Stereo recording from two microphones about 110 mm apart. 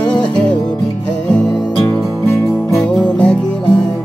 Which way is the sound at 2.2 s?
20° left (ahead or behind).